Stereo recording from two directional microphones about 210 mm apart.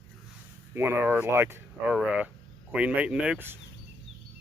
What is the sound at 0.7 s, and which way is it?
Speech, 10° right (ahead or behind).